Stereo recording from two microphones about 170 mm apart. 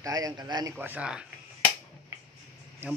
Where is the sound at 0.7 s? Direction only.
10° right (ahead or behind).